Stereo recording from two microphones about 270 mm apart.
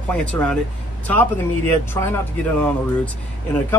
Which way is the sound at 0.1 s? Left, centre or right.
Centre.